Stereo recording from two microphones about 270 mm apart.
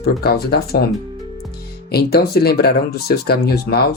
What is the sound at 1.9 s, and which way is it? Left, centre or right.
Speech, left.